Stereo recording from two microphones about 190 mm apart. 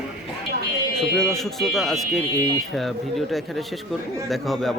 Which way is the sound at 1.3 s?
Centre (ahead or behind).